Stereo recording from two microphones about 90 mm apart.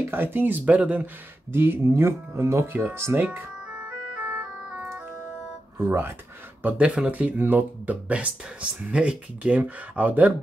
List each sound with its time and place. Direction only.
0.0 s speech: 25° right (ahead or behind)
3.3 s music: 15° right (ahead or behind)
5.9 s speech: 25° right (ahead or behind)
6.6 s speech: 10° right (ahead or behind)